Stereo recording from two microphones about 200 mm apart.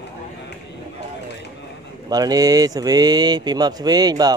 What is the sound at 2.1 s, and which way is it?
Speech, 20° right (ahead or behind).